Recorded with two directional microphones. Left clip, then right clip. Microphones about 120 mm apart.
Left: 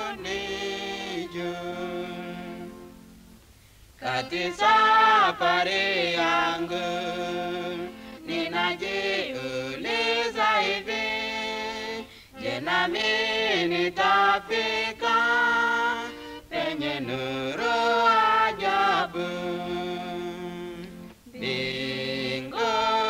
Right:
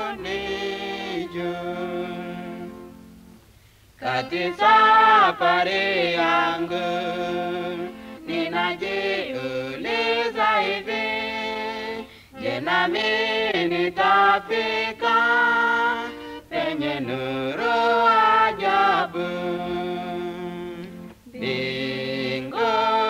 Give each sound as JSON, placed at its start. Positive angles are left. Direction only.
{"t": 0.0, "sound": "music", "side_deg": 35}
{"t": 4.0, "sound": "a sound", "side_deg": 30}
{"t": 6.1, "sound": "music", "side_deg": 30}
{"t": 7.4, "sound": "music", "side_deg": 45}
{"t": 7.7, "sound": "music", "side_deg": 30}
{"t": 9.2, "sound": "music", "side_deg": 35}
{"t": 11.5, "sound": "music", "side_deg": 40}
{"t": 15.5, "sound": "music", "side_deg": 25}
{"t": 16.7, "sound": "mantra", "side_deg": 45}
{"t": 17.2, "sound": "mantra", "side_deg": 30}
{"t": 18.1, "sound": "choir", "side_deg": 40}
{"t": 18.6, "sound": "music", "side_deg": 30}
{"t": 19.8, "sound": "music", "side_deg": 45}